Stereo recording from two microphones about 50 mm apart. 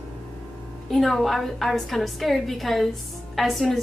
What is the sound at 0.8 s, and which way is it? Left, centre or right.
A woman's voice, centre.